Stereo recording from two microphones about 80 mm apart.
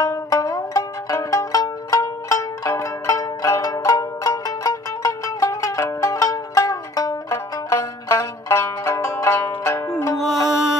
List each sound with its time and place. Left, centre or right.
0.0 s music: left
7.7 s music: left
10.2 s music: centre